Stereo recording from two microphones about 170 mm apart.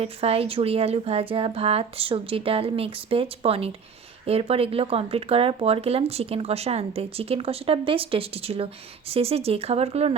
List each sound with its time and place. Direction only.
0.0 s speech: 35° right (ahead or behind)